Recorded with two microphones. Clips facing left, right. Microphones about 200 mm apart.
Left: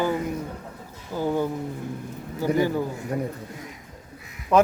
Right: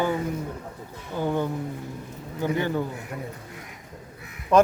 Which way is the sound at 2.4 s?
5° left (ahead or behind).